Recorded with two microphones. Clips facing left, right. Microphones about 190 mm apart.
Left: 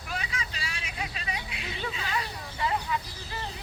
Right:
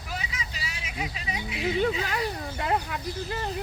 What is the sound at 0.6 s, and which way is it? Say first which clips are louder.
Vehicle: right 2 dB; 20° right (ahead or behind).